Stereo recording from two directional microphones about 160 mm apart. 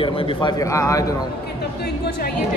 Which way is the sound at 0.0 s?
35° left (ahead or behind).